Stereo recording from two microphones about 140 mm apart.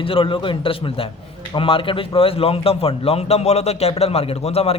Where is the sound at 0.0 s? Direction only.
40° left (ahead or behind).